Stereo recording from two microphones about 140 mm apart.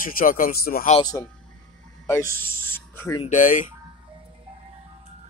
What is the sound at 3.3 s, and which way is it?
Speech, 70° left (ahead or behind).